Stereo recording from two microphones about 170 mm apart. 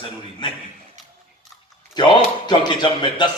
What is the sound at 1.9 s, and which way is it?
Speech, 25° left (ahead or behind).